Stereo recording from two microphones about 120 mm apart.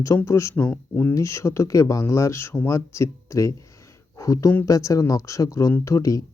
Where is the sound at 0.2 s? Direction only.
25° left (ahead or behind).